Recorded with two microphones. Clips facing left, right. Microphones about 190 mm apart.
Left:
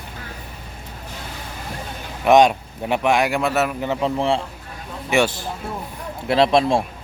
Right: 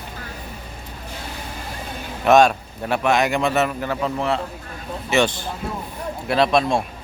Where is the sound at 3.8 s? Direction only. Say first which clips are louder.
Left 2 dB; 25° left (ahead or behind).